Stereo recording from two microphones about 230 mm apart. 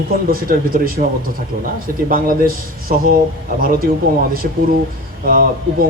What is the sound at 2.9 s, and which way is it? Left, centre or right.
A man's voice, right.